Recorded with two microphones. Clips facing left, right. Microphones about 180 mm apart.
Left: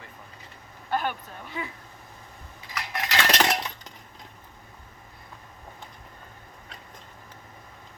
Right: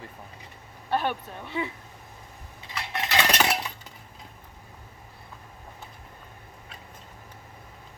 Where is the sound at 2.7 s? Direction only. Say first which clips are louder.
Right 1 dB; 30° right (ahead or behind); by 3.9 s 10° right (ahead or behind).